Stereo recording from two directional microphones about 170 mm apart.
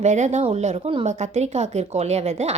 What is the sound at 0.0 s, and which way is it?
A woman's voice, 45° right (ahead or behind).